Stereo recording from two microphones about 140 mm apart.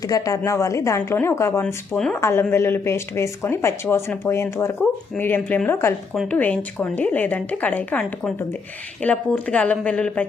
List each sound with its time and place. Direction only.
0.1 s a woman's voice: 20° left (ahead or behind); by 10.2 s 5° left (ahead or behind)